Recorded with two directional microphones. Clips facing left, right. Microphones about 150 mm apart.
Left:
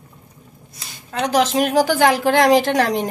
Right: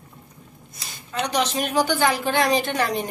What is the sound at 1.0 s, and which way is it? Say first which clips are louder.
A woman's voice: left 6 dB; 85° left.